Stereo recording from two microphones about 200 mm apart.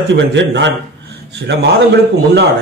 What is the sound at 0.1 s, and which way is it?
A man's voice, 65° right (ahead or behind).